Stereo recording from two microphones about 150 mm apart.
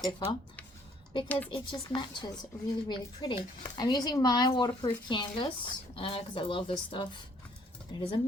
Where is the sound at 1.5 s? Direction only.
30° left (ahead or behind).